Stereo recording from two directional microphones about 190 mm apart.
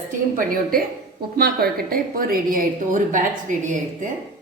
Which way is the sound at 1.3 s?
50° right (ahead or behind).